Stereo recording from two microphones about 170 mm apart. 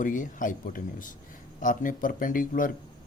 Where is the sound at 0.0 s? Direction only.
50° left (ahead or behind).